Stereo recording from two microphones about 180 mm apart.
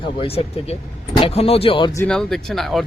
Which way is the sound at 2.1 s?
5° left (ahead or behind).